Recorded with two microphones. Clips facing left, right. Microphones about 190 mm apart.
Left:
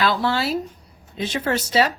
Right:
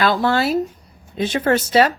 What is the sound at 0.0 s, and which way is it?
Speech, 50° right (ahead or behind).